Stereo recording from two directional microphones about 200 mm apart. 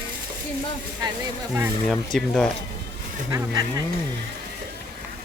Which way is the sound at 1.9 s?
5° left (ahead or behind).